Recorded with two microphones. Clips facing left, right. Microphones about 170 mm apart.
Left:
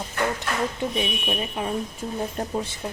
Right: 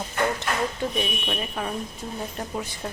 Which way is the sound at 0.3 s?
20° left (ahead or behind).